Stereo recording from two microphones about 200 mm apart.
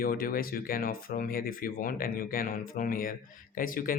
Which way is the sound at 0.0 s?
45° left (ahead or behind).